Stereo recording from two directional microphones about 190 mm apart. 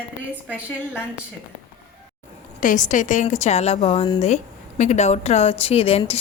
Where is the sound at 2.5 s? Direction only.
40° left (ahead or behind).